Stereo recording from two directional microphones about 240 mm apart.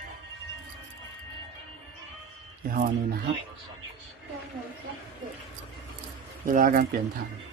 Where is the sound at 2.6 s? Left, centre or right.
Right.